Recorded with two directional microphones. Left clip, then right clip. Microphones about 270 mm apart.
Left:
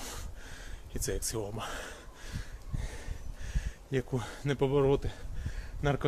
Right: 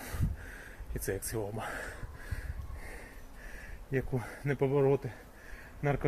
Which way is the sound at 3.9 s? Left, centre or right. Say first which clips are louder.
Left 1 dB; centre.